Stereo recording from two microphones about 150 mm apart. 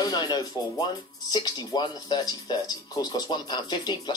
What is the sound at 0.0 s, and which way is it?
Speech, 25° left (ahead or behind).